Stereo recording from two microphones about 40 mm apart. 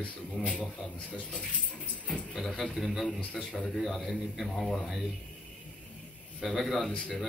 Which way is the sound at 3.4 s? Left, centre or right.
Centre.